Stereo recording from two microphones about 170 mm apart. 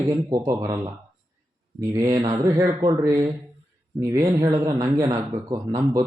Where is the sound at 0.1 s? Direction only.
20° right (ahead or behind).